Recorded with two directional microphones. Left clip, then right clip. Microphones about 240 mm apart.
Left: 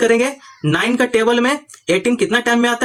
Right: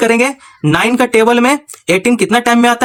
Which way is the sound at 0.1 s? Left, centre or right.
Right.